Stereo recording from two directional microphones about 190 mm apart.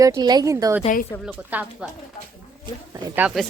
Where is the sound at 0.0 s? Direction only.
20° right (ahead or behind).